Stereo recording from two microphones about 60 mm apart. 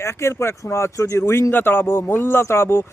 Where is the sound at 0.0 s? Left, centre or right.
Left.